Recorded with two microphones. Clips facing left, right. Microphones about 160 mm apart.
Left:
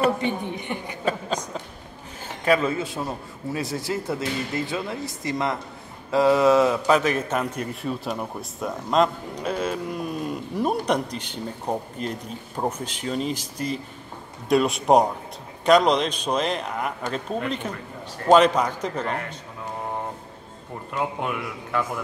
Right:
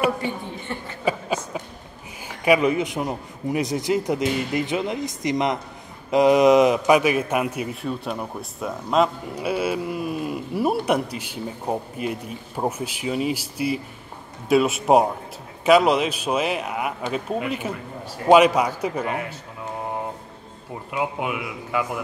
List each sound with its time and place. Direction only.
0.2 s a woman's voice: 15° left (ahead or behind)
1.0 s a sound: 10° right (ahead or behind)
2.2 s a man's voice: 15° right (ahead or behind)
20.9 s speech: 5° right (ahead or behind)